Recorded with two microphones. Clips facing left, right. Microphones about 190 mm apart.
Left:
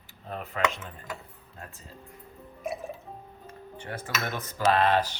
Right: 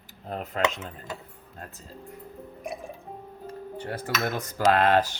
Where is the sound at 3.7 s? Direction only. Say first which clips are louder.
Right 3 dB; 35° right (ahead or behind).